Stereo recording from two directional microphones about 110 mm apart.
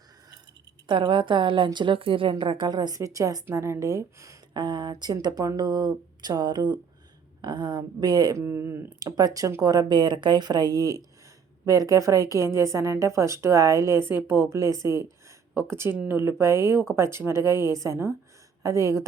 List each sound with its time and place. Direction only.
0.9 s a woman's voice: 50° right (ahead or behind); by 4.4 s 30° right (ahead or behind)
4.5 s speech: 45° right (ahead or behind)
8.4 s a woman's voice: 25° right (ahead or behind)
9.0 s a woman's voice: 35° right (ahead or behind)